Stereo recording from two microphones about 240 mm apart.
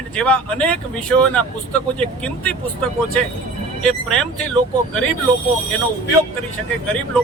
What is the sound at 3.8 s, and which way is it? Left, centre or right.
Speech, centre.